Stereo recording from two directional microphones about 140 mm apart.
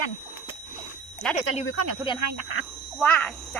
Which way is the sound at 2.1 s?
35° left (ahead or behind).